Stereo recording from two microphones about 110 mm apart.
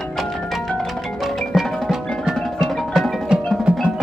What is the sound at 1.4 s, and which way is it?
Music, 5° left (ahead or behind).